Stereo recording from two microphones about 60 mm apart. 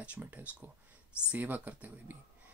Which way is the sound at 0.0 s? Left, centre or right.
Right.